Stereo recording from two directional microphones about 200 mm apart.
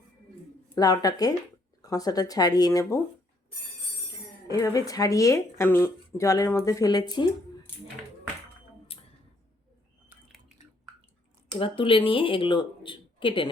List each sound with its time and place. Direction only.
0.8 s speech: 20° left (ahead or behind)
4.1 s speech: 15° left (ahead or behind)
8.9 s a sound: 30° left (ahead or behind)
11.6 s speech: 25° left (ahead or behind)